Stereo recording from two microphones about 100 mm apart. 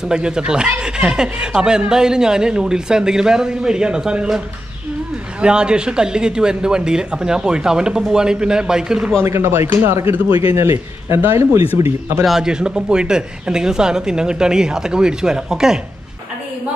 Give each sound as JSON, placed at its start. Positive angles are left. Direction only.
{"t": 0.0, "sound": "speech", "side_deg": -5}
{"t": 5.4, "sound": "speech", "side_deg": -10}
{"t": 9.2, "sound": "a man's voice", "side_deg": -25}
{"t": 12.3, "sound": "speech", "side_deg": -5}